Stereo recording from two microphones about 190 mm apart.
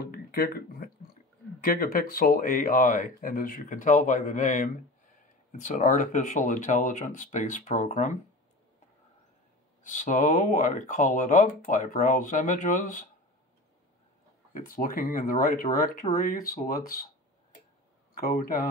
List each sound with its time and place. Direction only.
0.0 s a sound: 55° left (ahead or behind)
1.6 s speech: 50° left (ahead or behind)
9.8 s speech: 40° left (ahead or behind)
14.5 s speech: 45° left (ahead or behind)
18.1 s speech: 50° left (ahead or behind)